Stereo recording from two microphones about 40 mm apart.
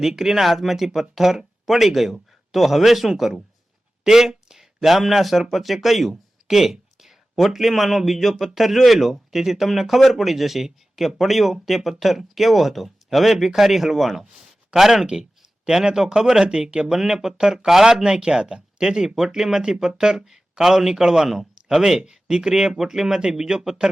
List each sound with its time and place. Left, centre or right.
0.1 s a man's voice: centre
16.5 s speech: right
16.8 s speech: centre
18.0 s speech: right